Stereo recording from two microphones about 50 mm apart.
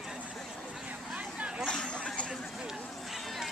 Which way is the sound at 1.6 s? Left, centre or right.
Centre.